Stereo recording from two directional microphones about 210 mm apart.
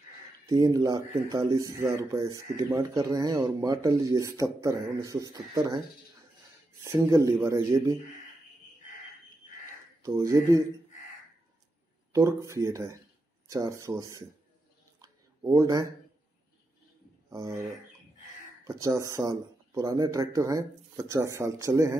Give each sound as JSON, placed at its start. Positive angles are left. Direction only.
{"t": 0.5, "sound": "speech", "side_deg": -20}
{"t": 6.8, "sound": "speech", "side_deg": -15}
{"t": 10.0, "sound": "speech", "side_deg": -15}
{"t": 12.1, "sound": "speech", "side_deg": -15}
{"t": 15.0, "sound": "a sound", "side_deg": -15}
{"t": 18.6, "sound": "speech", "side_deg": -15}